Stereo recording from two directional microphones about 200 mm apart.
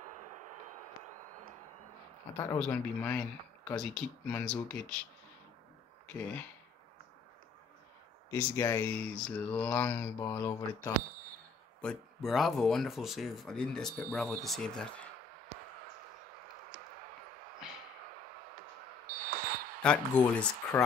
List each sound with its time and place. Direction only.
0.0 s a sound: 35° right (ahead or behind)
2.3 s speech: 10° left (ahead or behind)
6.0 s speech: 5° left (ahead or behind)
8.3 s speech: 10° left (ahead or behind)
19.2 s basketball bounce: 45° right (ahead or behind)
19.8 s speech: 5° left (ahead or behind)